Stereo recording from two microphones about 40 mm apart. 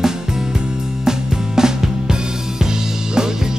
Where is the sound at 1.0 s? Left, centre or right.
Centre.